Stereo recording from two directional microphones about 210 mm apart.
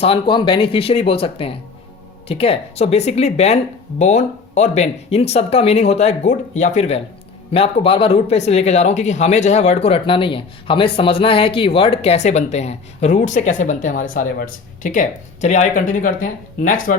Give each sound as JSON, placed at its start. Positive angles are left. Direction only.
{"t": 0.0, "sound": "speech", "side_deg": 25}